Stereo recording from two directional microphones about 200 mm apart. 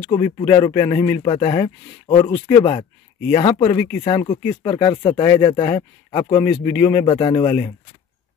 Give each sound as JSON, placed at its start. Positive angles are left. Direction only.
{"t": 0.0, "sound": "speech", "side_deg": 25}